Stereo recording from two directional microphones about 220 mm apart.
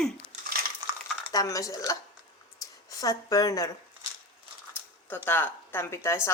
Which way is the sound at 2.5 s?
15° left (ahead or behind).